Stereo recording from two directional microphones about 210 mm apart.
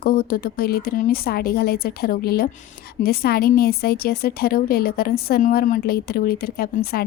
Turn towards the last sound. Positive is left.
turn(degrees=45)  # may be behind; listen again after turning